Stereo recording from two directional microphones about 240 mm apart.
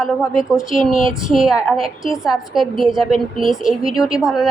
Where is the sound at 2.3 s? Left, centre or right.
Centre.